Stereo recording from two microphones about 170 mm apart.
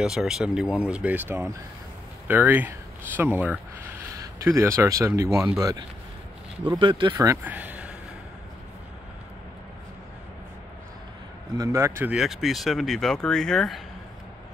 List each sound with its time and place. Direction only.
0.0 s speech: centre (ahead or behind); by 7.3 s 25° right (ahead or behind)
7.4 s a sound: 10° right (ahead or behind)
11.5 s speech: 20° right (ahead or behind); by 13.8 s centre (ahead or behind)